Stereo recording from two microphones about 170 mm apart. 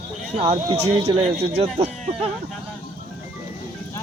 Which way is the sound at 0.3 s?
35° right (ahead or behind).